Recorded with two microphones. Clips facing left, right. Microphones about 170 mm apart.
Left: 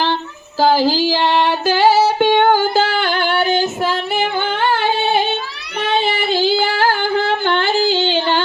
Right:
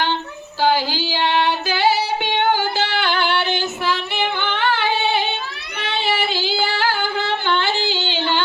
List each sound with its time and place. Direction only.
0.6 s female singing: 40° left (ahead or behind)